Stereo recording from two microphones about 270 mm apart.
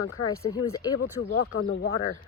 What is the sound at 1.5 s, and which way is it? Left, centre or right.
Speech, left.